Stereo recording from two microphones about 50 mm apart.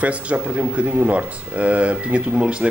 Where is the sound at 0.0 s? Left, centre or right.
Right.